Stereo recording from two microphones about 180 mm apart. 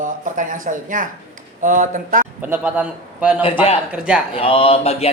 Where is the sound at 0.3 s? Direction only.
45° right (ahead or behind).